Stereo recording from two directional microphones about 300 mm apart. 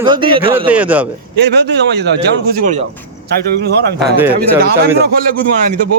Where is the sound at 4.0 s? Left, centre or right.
Centre.